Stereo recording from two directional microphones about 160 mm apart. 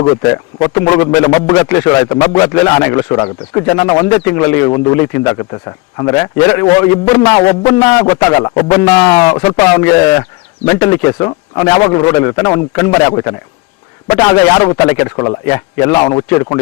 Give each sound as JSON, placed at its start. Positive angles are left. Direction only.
{"t": 0.0, "sound": "a man's voice", "side_deg": 25}